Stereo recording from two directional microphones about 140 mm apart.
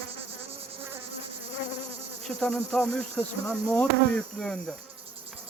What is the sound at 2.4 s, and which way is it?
Speech, 5° left (ahead or behind).